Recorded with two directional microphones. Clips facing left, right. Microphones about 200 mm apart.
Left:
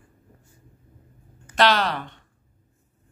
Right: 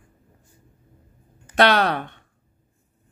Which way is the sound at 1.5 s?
60° right (ahead or behind).